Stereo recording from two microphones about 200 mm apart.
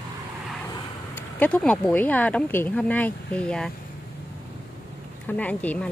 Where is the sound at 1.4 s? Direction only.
5° left (ahead or behind).